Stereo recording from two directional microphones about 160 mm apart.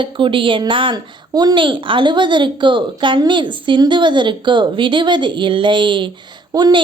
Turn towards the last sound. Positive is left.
turn(degrees=-25)  # may be behind; listen again after turning